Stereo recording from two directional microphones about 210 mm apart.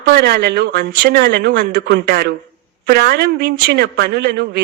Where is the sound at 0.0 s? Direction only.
50° right (ahead or behind).